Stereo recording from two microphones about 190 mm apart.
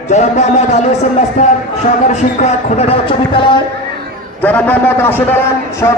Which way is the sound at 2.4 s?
35° left (ahead or behind).